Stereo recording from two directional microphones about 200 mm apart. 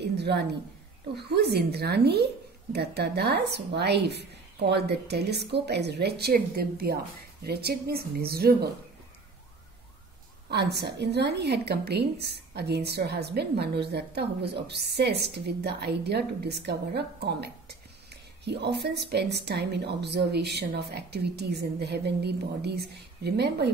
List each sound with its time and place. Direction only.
0.0 s a sound: 55° right (ahead or behind)
1.1 s a woman's voice: 55° right (ahead or behind)
10.5 s a woman's voice: 55° right (ahead or behind)